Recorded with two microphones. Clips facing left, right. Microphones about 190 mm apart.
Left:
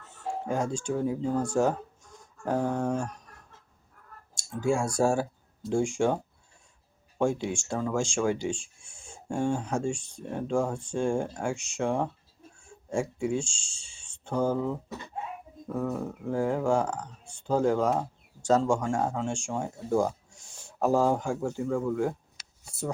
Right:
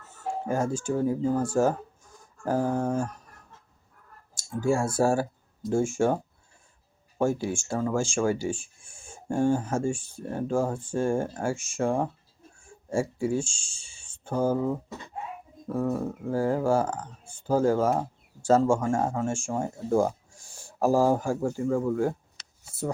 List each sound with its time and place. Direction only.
0.4 s speech: 5° right (ahead or behind)
4.4 s speech: 5° right (ahead or behind)
7.2 s speech: 5° right (ahead or behind)